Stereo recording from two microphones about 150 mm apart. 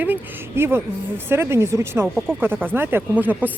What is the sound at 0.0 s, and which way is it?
Speech, 15° right (ahead or behind).